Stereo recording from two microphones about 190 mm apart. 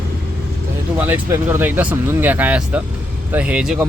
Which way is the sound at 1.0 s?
10° right (ahead or behind).